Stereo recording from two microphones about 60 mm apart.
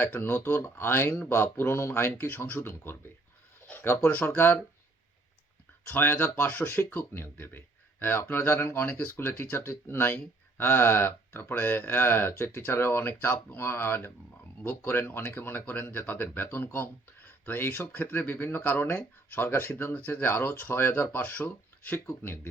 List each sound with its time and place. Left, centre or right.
0.0 s speech: left
2.1 s speech: left
3.7 s a sound: left
4.1 s speech: left
4.4 s speech: left
5.9 s speech: left
8.8 s speech: left
9.4 s speech: left
15.1 s speech: left
15.4 s speech: left